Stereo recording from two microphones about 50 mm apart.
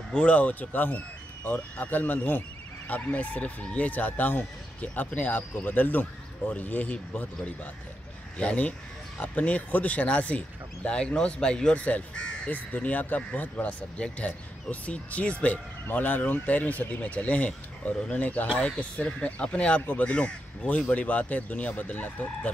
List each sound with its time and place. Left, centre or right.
0.1 s speech: left
11.7 s speech: left
18.5 s speech: centre